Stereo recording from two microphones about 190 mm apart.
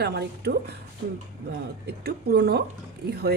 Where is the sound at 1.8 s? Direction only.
60° right (ahead or behind).